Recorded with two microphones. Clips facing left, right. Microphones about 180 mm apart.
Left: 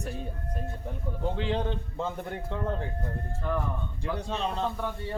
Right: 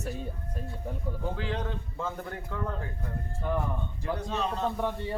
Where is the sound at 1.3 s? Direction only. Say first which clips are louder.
Left 4 dB; 25° left (ahead or behind).